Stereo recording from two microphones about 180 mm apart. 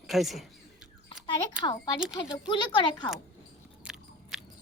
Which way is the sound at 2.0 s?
5° right (ahead or behind).